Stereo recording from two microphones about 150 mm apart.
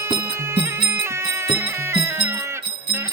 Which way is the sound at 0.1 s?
30° right (ahead or behind).